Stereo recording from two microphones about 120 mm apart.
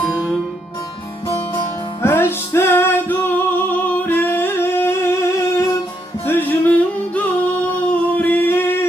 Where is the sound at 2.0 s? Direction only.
20° left (ahead or behind).